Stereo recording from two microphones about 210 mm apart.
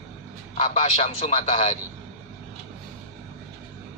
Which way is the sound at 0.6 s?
30° left (ahead or behind).